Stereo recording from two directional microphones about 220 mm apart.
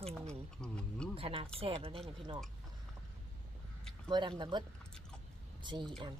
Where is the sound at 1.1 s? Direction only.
25° right (ahead or behind).